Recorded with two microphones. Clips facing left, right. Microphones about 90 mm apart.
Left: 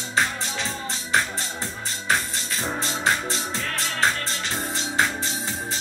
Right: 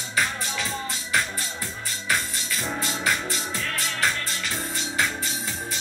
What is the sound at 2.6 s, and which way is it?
Music, 30° left (ahead or behind).